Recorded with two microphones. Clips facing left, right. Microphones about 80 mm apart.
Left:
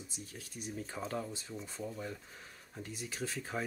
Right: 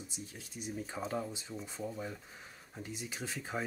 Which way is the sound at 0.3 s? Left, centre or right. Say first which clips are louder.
Even; centre.